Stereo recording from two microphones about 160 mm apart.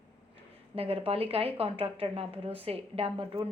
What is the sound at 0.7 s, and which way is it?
A woman's voice, 35° right (ahead or behind).